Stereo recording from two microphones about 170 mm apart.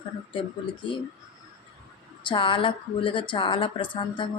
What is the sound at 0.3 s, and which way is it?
Speech, 30° left (ahead or behind).